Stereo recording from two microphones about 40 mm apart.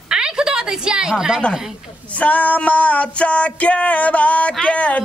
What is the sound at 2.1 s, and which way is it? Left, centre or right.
Speech, left.